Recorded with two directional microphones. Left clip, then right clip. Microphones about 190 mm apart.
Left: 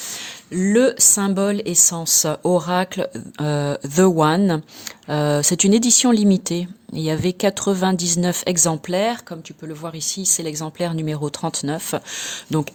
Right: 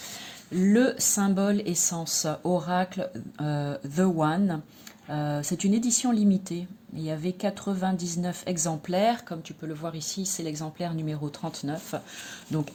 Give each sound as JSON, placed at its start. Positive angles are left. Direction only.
{"t": 0.1, "sound": "speech", "side_deg": 40}